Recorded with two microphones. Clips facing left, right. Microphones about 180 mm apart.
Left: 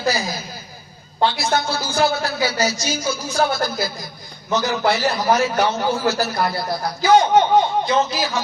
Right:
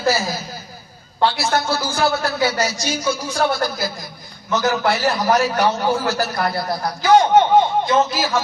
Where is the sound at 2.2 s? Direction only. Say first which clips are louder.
Right 1 dB; centre (ahead or behind).